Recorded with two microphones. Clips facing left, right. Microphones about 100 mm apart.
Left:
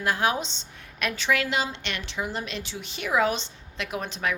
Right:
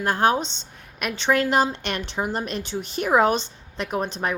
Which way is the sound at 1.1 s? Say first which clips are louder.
Right 6 dB; 35° right (ahead or behind).